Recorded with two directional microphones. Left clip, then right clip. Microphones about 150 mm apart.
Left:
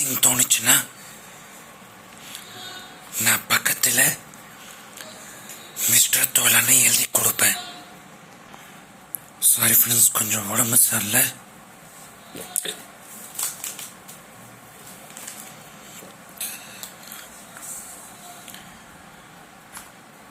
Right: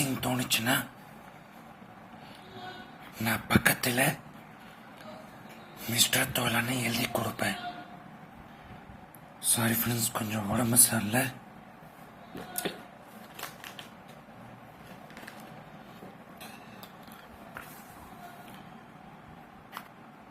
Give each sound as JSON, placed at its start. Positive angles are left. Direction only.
{"t": 0.0, "sound": "speech", "side_deg": 10}
{"t": 3.2, "sound": "speech", "side_deg": 0}
{"t": 5.9, "sound": "speech", "side_deg": 5}
{"t": 9.5, "sound": "speech", "side_deg": 5}
{"t": 12.6, "sound": "a sound", "side_deg": 30}